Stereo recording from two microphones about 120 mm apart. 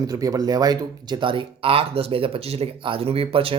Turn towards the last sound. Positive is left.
turn(degrees=-50)  # may be behind; listen again after turning